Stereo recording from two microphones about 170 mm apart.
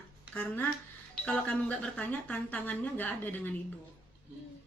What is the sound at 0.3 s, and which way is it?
Speech, 10° left (ahead or behind).